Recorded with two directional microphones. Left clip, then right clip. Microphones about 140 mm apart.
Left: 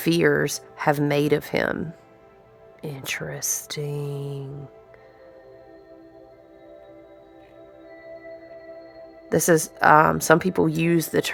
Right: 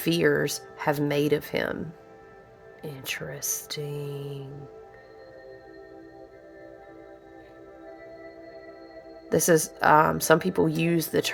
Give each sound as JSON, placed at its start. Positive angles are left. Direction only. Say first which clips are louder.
{"t": 0.0, "sound": "speech", "louder": "left 3 dB", "side_deg": 25}
{"t": 9.3, "sound": "speech", "louder": "left 2 dB", "side_deg": 20}